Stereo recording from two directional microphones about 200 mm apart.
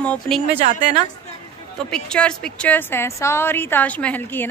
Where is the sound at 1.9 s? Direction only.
5° left (ahead or behind).